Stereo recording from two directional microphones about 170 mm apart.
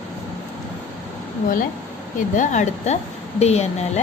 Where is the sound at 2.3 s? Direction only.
45° left (ahead or behind).